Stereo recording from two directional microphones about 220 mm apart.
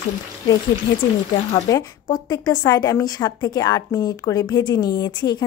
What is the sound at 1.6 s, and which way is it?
A woman's voice, 15° left (ahead or behind).